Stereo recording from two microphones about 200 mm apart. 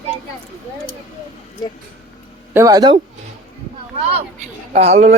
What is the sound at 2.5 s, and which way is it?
Speech, 15° right (ahead or behind).